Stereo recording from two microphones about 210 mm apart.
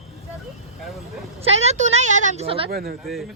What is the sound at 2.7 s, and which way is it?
Speech, 45° right (ahead or behind).